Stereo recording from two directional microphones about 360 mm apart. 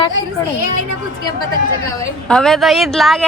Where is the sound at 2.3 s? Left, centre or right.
Centre.